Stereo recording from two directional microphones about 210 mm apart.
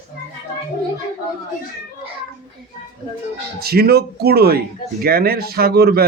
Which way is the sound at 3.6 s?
50° right (ahead or behind).